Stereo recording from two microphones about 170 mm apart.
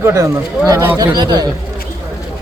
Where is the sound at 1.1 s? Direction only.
25° right (ahead or behind).